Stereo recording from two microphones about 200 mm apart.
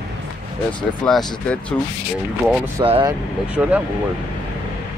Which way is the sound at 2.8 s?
25° right (ahead or behind).